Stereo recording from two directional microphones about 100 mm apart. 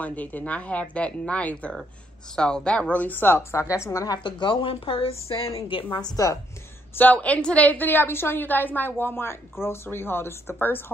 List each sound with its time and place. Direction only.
0.0 s a woman's voice: 15° left (ahead or behind); by 4.2 s 35° left (ahead or behind)
4.2 s a woman's voice: 55° left (ahead or behind); by 5.5 s 70° left (ahead or behind)
6.1 s a woman's voice: 35° left (ahead or behind)
7.0 s a woman's voice: 15° left (ahead or behind)